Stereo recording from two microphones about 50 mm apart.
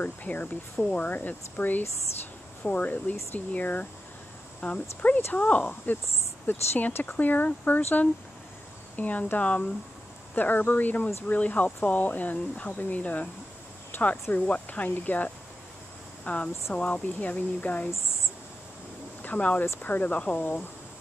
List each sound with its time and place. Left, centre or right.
0.0 s speech: left
6.5 s speech: left
13.9 s speech: left
14.3 s speech: left
19.2 s speech: left